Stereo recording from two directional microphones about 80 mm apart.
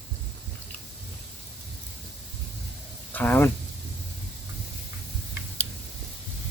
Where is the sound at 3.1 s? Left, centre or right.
Left.